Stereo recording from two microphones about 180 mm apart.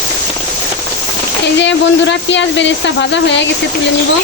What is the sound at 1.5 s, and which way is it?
Speech, 85° left.